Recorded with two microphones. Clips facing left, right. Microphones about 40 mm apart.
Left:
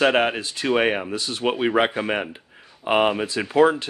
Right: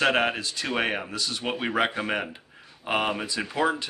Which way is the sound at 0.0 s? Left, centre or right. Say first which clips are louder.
Left 4 dB; centre.